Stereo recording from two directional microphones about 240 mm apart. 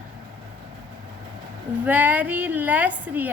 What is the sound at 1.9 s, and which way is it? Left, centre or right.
A woman's voice, centre.